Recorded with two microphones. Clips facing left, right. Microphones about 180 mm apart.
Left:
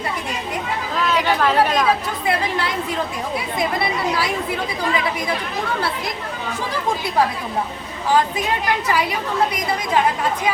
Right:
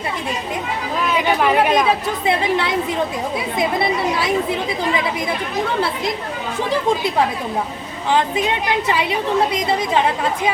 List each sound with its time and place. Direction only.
1.0 s speech: 15° right (ahead or behind)
8.9 s a woman's voice: 25° right (ahead or behind)